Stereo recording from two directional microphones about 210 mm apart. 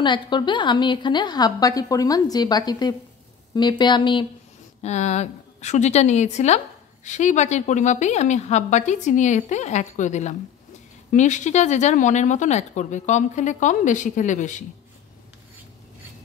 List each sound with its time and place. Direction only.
0.0 s a woman's voice: 20° left (ahead or behind)
4.8 s speech: 35° left (ahead or behind)